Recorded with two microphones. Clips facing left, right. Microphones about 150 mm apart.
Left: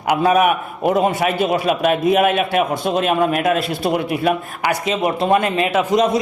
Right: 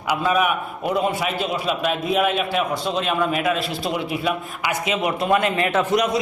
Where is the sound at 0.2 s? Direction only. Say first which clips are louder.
Left 6 dB; 65° left (ahead or behind).